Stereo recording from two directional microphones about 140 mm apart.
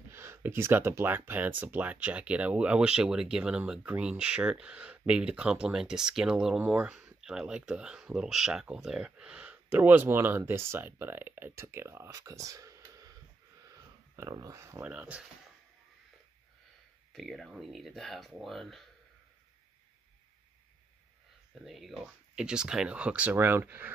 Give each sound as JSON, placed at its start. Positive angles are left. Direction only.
{"t": 0.1, "sound": "speech", "side_deg": -15}
{"t": 13.7, "sound": "a sound", "side_deg": -25}
{"t": 14.8, "sound": "speech", "side_deg": -10}
{"t": 17.1, "sound": "speech", "side_deg": 0}
{"t": 21.6, "sound": "speech", "side_deg": 0}